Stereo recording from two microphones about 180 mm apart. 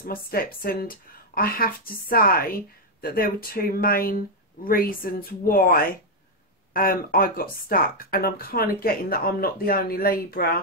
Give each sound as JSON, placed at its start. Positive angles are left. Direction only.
{"t": 0.0, "sound": "speech", "side_deg": 55}